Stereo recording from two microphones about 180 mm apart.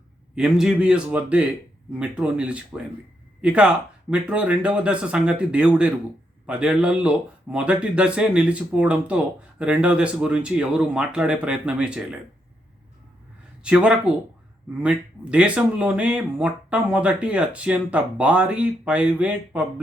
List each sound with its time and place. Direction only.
0.3 s speech: 5° right (ahead or behind)
13.6 s speech: 5° right (ahead or behind)